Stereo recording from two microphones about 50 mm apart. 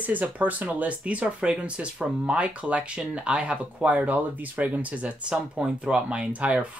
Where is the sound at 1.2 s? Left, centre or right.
Centre.